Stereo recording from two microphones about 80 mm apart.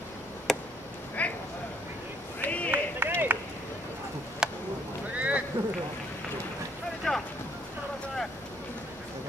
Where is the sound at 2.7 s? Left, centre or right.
Right.